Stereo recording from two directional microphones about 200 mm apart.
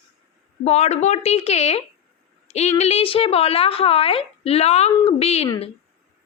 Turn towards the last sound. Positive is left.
turn(degrees=30)  # may be behind; listen again after turning